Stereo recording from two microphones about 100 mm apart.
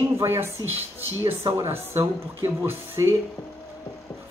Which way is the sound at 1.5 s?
25° right (ahead or behind).